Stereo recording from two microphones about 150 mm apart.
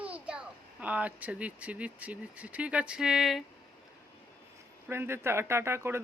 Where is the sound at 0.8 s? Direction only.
10° right (ahead or behind).